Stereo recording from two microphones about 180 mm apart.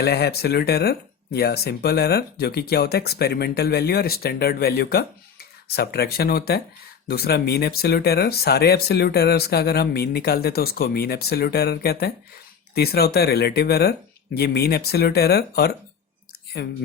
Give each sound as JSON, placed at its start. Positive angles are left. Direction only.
{"t": 0.0, "sound": "speech", "side_deg": 60}